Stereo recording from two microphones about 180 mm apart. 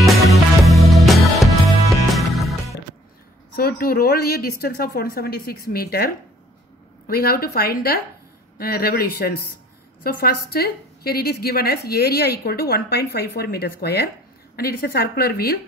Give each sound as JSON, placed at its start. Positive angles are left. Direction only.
{"t": 0.0, "sound": "music", "side_deg": 0}
{"t": 3.5, "sound": "a woman's voice", "side_deg": 55}